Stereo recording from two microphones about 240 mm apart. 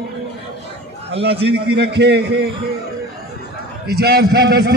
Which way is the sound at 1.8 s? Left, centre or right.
Right.